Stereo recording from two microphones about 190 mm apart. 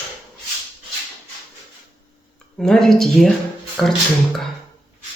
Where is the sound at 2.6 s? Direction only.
Centre (ahead or behind).